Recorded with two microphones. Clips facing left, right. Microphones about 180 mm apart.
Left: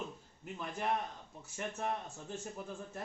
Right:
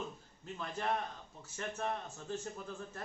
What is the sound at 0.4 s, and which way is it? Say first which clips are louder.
Speech: left 1 dB; 15° left (ahead or behind).